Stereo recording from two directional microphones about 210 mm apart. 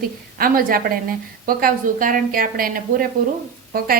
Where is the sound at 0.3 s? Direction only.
45° right (ahead or behind).